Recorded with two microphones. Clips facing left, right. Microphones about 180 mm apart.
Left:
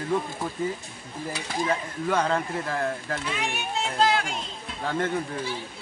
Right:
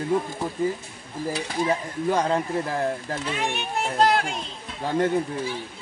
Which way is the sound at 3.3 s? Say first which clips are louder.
Right 5 dB; 55° right (ahead or behind).